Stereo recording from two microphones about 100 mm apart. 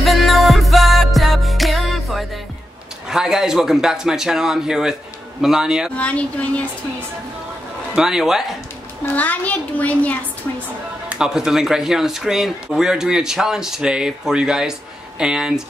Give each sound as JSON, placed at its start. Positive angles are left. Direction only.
{"t": 0.0, "sound": "music", "side_deg": 0}
{"t": 3.1, "sound": "speech", "side_deg": -5}
{"t": 5.9, "sound": "a child's voice", "side_deg": 15}
{"t": 7.9, "sound": "speech", "side_deg": -5}
{"t": 9.0, "sound": "a child's voice", "side_deg": 15}
{"t": 11.1, "sound": "speech", "side_deg": -5}